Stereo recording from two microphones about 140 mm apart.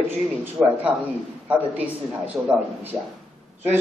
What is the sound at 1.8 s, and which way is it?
A man's voice, 10° right (ahead or behind).